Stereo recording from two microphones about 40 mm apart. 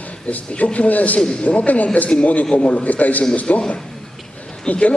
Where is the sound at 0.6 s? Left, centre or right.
Left.